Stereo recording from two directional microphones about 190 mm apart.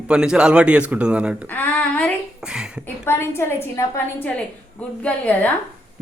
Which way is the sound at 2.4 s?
5° right (ahead or behind).